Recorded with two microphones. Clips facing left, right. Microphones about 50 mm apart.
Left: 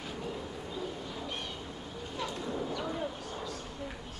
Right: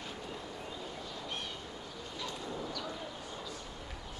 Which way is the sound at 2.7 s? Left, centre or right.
Left.